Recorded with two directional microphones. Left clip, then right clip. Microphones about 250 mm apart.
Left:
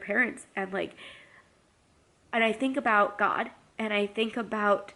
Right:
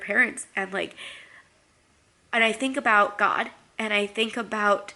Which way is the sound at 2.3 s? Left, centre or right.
Centre.